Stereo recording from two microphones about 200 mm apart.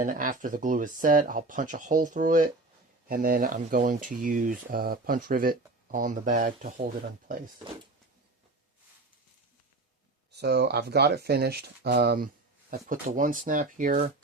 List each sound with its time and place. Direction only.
0.0 s speech: 40° right (ahead or behind)
10.3 s speech: 55° right (ahead or behind)